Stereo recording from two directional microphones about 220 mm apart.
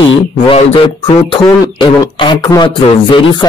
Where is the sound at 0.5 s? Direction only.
25° left (ahead or behind).